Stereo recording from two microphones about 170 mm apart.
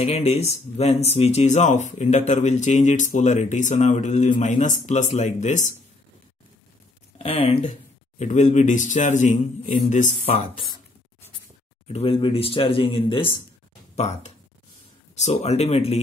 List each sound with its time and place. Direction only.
0.0 s a man's voice: 40° left (ahead or behind)
7.2 s speech: 30° left (ahead or behind)
8.2 s a man's voice: 45° left (ahead or behind)
11.9 s speech: 35° left (ahead or behind)